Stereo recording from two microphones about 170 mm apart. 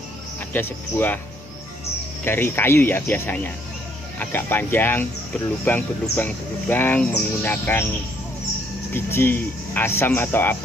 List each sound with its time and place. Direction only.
0.5 s speech: 10° left (ahead or behind)
2.2 s speech: 15° left (ahead or behind)
8.9 s speech: 15° left (ahead or behind)